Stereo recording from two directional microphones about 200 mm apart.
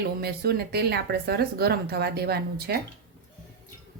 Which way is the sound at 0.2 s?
50° right (ahead or behind).